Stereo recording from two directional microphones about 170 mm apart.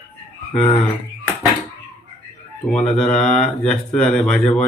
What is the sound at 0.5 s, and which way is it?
Speech, 30° left (ahead or behind).